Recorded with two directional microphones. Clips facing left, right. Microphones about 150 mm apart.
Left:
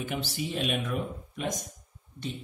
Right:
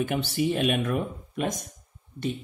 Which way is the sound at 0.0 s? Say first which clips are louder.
Right 7 dB; 55° right (ahead or behind).